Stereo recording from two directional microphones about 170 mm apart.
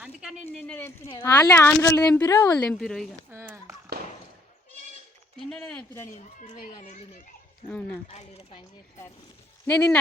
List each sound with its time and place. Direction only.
0.0 s a sound: 5° right (ahead or behind)
0.5 s speech: 10° left (ahead or behind)
3.2 s a sound: 15° right (ahead or behind)
5.4 s speech: 5° left (ahead or behind)
6.4 s a child's voice: 45° left (ahead or behind)
7.7 s speech: 10° left (ahead or behind)
8.0 s speech: 35° left (ahead or behind)
9.6 s speech: 10° left (ahead or behind)